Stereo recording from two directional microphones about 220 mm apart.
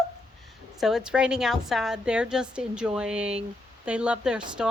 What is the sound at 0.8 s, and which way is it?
A woman's voice, centre (ahead or behind).